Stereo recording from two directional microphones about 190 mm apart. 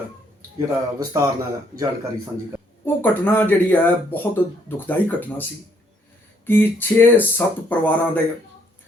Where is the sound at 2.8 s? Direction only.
10° left (ahead or behind).